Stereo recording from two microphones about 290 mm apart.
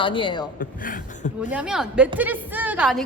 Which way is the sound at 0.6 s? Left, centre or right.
Left.